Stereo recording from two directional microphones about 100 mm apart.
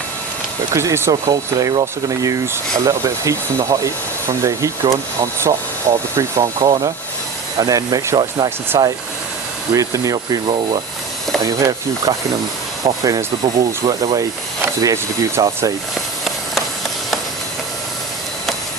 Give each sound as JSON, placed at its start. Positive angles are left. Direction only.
{"t": 0.7, "sound": "speech", "side_deg": -30}
{"t": 1.1, "sound": "speech", "side_deg": -40}
{"t": 5.2, "sound": "speech", "side_deg": -30}
{"t": 6.6, "sound": "speech", "side_deg": -50}
{"t": 7.6, "sound": "speech", "side_deg": -40}
{"t": 9.7, "sound": "speech", "side_deg": -35}
{"t": 11.4, "sound": "speech", "side_deg": -35}